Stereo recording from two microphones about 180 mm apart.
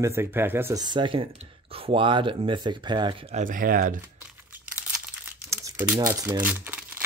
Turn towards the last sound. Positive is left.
turn(degrees=-10)  # may be behind; listen again after turning